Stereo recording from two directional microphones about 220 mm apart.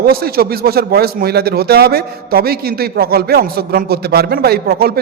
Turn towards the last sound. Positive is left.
turn(degrees=-45)  # may be behind; listen again after turning